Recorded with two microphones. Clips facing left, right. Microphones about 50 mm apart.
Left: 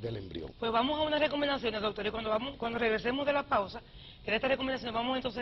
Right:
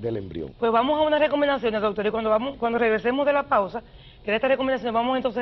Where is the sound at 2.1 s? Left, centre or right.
Centre.